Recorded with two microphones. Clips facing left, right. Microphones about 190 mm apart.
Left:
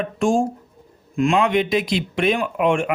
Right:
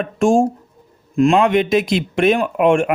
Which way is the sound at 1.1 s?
40° right (ahead or behind).